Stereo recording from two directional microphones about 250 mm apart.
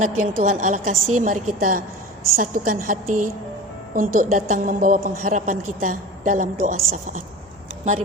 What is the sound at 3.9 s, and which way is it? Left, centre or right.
A woman's voice, right.